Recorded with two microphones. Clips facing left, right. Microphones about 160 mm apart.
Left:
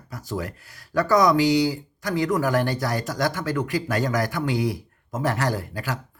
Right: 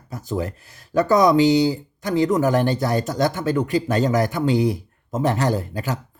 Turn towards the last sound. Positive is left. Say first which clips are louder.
# right 4 dB
turn(degrees=-25)  # may be behind; listen again after turning